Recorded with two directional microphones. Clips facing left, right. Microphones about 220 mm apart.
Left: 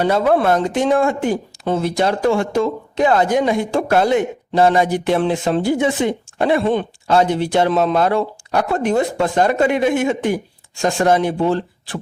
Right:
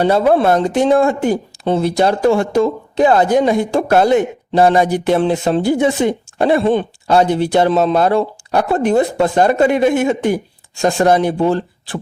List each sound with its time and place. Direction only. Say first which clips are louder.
0.0 s speech: right 3 dB; 30° right (ahead or behind)